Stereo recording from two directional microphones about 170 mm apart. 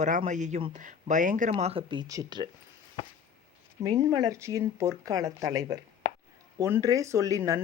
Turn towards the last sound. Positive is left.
turn(degrees=-20)  # may be behind; listen again after turning